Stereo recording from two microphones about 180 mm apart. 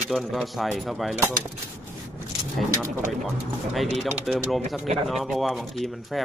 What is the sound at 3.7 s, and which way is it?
Speech, centre (ahead or behind).